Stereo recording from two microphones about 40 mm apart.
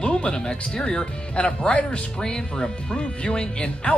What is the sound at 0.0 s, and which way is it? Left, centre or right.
Speech, left.